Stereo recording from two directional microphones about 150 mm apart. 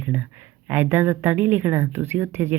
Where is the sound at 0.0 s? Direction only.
10° right (ahead or behind).